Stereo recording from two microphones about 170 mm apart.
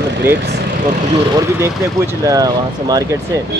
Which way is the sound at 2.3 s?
20° right (ahead or behind).